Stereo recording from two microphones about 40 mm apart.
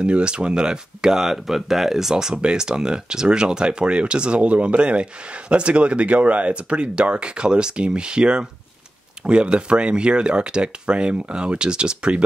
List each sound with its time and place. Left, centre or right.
0.0 s speech: right
1.2 s speech: centre; by 12.2 s right